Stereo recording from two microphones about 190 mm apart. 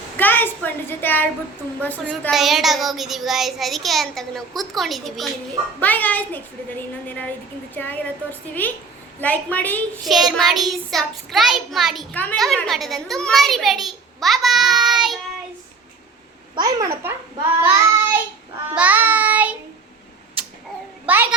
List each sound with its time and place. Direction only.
0.2 s a sound: 10° left (ahead or behind)
2.2 s a child's voice: centre (ahead or behind)
16.6 s a child's voice: 20° right (ahead or behind)
17.6 s child singing: 10° right (ahead or behind)